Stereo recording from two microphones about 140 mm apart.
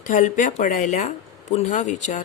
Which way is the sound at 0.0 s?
65° left (ahead or behind).